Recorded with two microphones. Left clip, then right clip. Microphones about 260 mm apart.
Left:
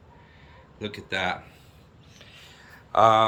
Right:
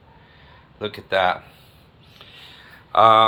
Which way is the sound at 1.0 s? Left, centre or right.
Centre.